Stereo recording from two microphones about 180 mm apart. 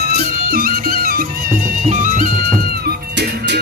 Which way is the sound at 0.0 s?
50° right (ahead or behind).